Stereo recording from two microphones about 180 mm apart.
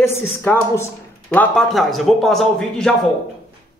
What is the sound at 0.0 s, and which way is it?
A woman's voice, 15° left (ahead or behind).